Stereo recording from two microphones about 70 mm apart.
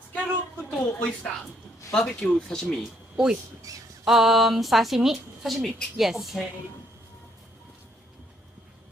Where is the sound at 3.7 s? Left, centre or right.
Right.